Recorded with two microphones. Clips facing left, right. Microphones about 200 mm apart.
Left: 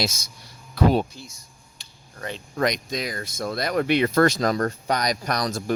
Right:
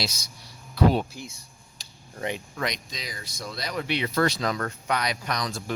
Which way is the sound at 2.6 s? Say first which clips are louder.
Left 8 dB; 50° left (ahead or behind).